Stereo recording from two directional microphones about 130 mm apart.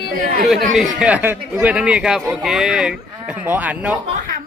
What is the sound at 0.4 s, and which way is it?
A man's voice, centre (ahead or behind).